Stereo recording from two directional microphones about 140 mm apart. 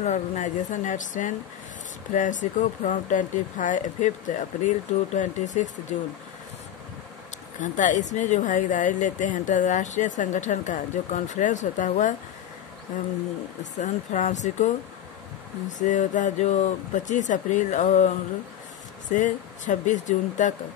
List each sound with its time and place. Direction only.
0.0 s speech: 60° left (ahead or behind)
7.6 s speech: 65° left (ahead or behind)
13.6 s speech: 60° left (ahead or behind)
15.8 s speech: 65° left (ahead or behind)